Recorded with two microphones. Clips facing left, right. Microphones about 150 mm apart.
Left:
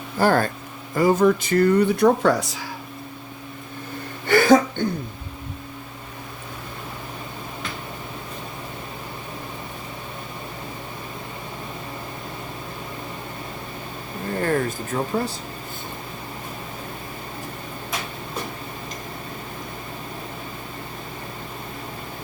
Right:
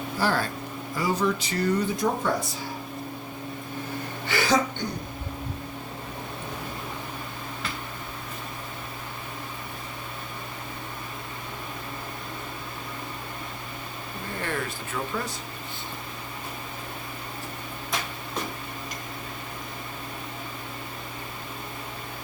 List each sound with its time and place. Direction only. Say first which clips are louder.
0.2 s speech: left 7 dB; 50° left (ahead or behind); by 2.6 s 90° left
4.3 s speech: left 9 dB; 50° left (ahead or behind)
14.4 s a sound: left 9 dB; 40° left (ahead or behind)